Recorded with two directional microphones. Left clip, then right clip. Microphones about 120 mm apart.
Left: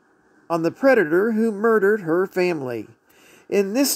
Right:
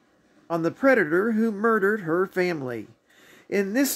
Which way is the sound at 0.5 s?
40° left (ahead or behind).